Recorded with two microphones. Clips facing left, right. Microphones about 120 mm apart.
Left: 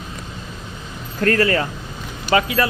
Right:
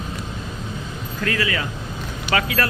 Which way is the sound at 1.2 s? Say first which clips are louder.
Left 7 dB; 45° left (ahead or behind).